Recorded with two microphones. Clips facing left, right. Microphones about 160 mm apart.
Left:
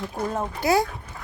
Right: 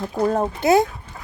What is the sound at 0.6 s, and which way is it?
Speech, 25° right (ahead or behind).